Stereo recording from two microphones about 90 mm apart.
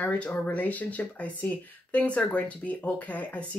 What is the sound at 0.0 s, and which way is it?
Speech, 15° left (ahead or behind).